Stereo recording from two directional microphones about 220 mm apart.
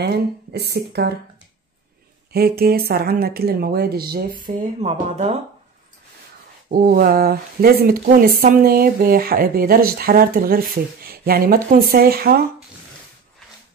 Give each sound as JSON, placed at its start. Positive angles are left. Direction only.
{"t": 0.0, "sound": "speech", "side_deg": -45}
{"t": 2.3, "sound": "speech", "side_deg": -45}
{"t": 6.7, "sound": "speech", "side_deg": -40}